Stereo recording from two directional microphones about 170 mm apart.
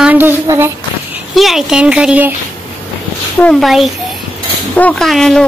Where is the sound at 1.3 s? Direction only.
Centre (ahead or behind).